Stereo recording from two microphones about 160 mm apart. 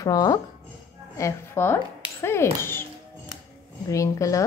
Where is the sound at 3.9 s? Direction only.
20° left (ahead or behind).